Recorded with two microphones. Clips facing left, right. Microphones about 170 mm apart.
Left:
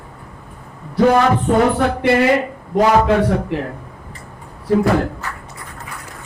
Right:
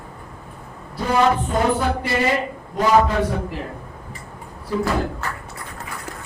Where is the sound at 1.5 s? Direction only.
65° left (ahead or behind).